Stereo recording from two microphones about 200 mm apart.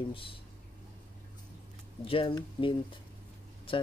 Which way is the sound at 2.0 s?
25° left (ahead or behind).